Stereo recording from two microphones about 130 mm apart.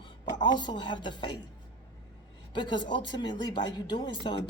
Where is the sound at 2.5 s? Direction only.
35° left (ahead or behind).